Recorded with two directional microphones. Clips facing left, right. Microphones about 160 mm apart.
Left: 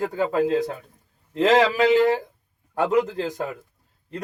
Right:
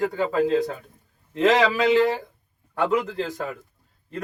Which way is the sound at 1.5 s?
40° left (ahead or behind).